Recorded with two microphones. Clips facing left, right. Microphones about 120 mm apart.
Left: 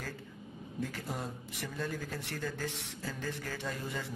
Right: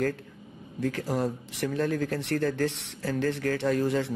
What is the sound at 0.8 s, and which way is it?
A man's voice, 80° right.